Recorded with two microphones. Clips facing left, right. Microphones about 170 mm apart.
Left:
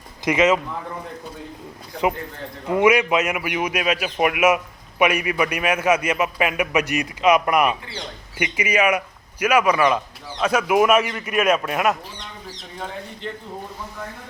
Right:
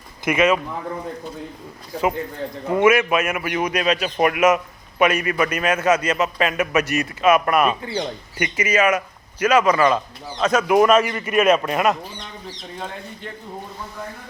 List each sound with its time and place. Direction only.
0.3 s a man's voice: 20° left (ahead or behind)
2.6 s a man's voice: 15° left (ahead or behind)